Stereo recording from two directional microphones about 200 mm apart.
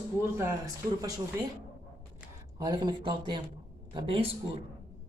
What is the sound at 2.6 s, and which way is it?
Speech, 20° right (ahead or behind).